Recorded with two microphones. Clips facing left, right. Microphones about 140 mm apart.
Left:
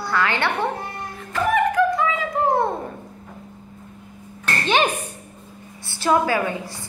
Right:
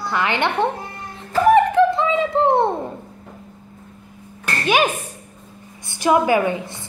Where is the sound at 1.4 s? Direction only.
30° right (ahead or behind).